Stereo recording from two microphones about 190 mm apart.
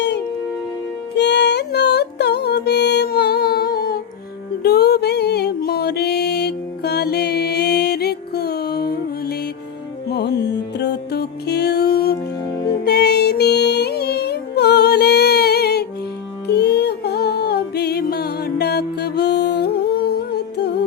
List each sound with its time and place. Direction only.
1.1 s music: 65° left (ahead or behind)